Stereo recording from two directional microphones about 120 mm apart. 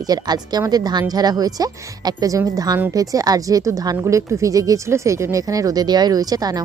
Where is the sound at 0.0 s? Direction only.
35° right (ahead or behind).